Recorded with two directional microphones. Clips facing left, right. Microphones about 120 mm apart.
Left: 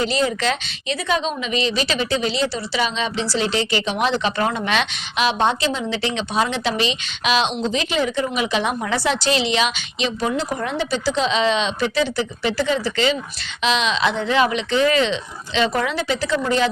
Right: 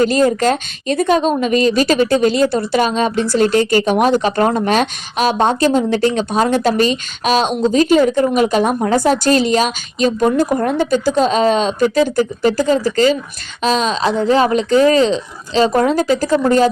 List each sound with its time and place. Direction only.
0.0 s a woman's voice: 45° right (ahead or behind)